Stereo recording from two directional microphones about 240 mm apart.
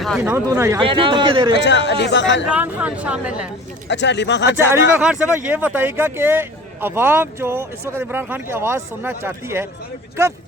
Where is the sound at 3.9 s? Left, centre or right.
Left.